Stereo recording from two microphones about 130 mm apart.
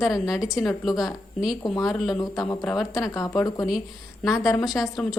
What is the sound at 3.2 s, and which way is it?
Speech, 25° left (ahead or behind).